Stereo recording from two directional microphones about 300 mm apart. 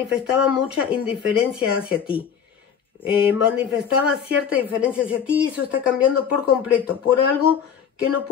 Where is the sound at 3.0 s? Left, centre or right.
Centre.